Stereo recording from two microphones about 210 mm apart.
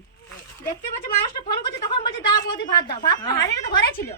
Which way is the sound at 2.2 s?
20° left (ahead or behind).